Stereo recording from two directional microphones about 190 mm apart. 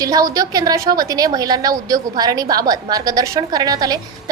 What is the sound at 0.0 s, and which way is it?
A woman's voice, 20° right (ahead or behind).